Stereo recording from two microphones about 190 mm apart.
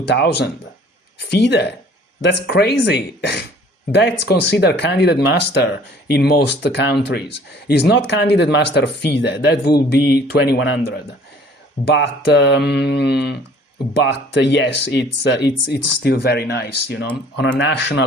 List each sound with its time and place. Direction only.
0.1 s speech: 60° left (ahead or behind)